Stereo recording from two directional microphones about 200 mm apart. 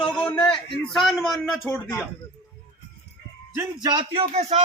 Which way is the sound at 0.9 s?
Centre (ahead or behind).